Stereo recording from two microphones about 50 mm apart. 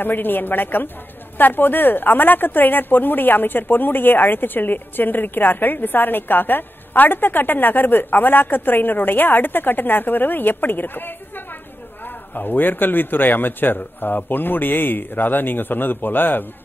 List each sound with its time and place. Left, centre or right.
0.0 s a woman's voice: left
12.4 s a woman's voice: left